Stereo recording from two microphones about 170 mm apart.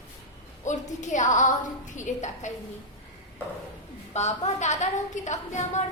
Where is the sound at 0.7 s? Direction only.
45° left (ahead or behind).